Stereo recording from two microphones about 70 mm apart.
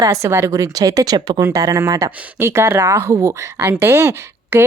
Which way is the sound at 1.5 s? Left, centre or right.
Right.